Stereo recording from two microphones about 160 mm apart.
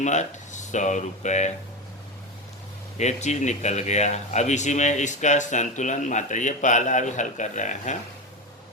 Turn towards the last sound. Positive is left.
turn(degrees=50)  # may be behind; listen again after turning